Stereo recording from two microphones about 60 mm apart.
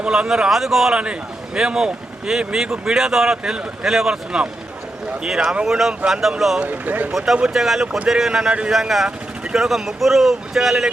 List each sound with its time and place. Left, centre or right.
0.0 s speech: centre
6.6 s speech: right
7.1 s speech: centre
8.7 s speech: centre